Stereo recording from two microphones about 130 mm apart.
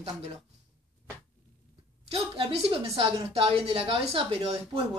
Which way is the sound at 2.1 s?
50° right (ahead or behind).